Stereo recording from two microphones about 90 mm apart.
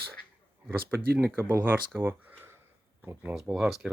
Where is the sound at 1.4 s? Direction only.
25° right (ahead or behind).